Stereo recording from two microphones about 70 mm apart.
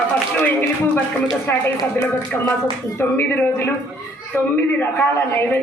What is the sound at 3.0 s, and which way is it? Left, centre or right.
A man's voice, left.